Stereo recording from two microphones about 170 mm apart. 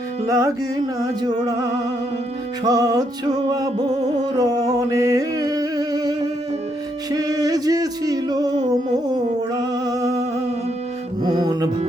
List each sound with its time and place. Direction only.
0.3 s music: 20° right (ahead or behind)
2.6 s music: 20° right (ahead or behind)
9.8 s music: 20° right (ahead or behind)
11.2 s music: 25° right (ahead or behind)